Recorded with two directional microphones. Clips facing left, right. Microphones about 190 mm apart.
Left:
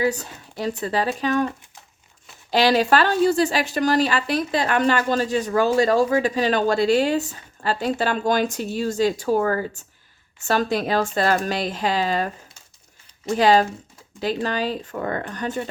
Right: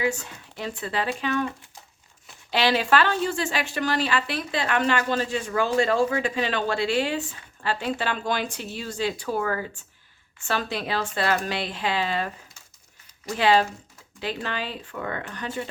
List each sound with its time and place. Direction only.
0.0 s speech: 40° left (ahead or behind)
2.5 s speech: 40° left (ahead or behind)
13.3 s speech: 40° left (ahead or behind)